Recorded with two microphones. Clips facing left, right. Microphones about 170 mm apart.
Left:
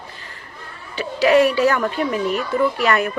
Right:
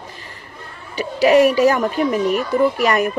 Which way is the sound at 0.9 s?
15° right (ahead or behind).